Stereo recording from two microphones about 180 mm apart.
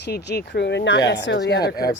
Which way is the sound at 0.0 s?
65° left (ahead or behind).